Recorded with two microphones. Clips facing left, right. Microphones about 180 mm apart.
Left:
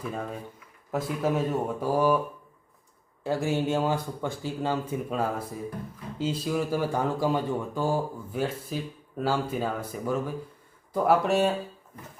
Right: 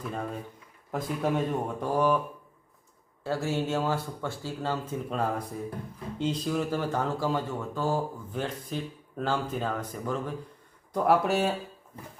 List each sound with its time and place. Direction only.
0.0 s speech: 5° left (ahead or behind)
3.2 s speech: 15° left (ahead or behind); by 11.5 s centre (ahead or behind)